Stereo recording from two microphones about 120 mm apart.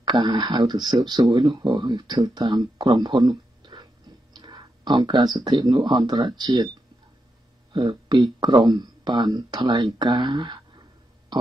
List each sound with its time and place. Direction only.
0.0 s speech: 40° right (ahead or behind)
7.7 s speech: 40° right (ahead or behind)